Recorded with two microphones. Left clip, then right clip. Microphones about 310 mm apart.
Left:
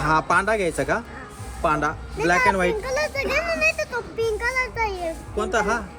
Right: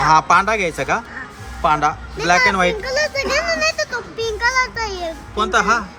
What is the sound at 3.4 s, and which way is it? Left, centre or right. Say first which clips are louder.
Children playing: right 2 dB; right.